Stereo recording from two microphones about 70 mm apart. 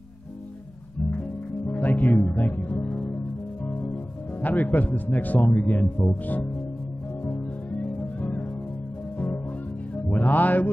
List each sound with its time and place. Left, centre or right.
1.7 s speech: left
3.6 s music: left
4.4 s a man's voice: left
6.0 s music: left
8.0 s music: left
10.0 s music: left